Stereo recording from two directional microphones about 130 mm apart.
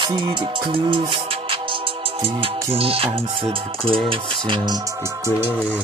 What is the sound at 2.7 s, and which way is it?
Music, 50° right (ahead or behind).